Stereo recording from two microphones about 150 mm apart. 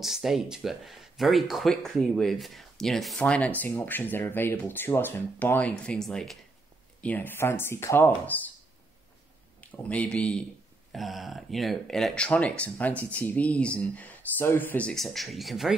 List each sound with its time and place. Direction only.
0.0 s speech: centre (ahead or behind); by 8.4 s 15° left (ahead or behind)
9.6 s speech: 10° left (ahead or behind)